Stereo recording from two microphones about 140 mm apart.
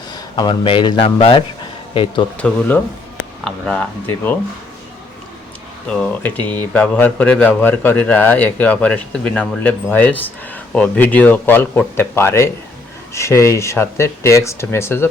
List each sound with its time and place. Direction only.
0.3 s speech: 35° left (ahead or behind)
2.4 s speech: 5° left (ahead or behind)
5.9 s speech: 10° left (ahead or behind)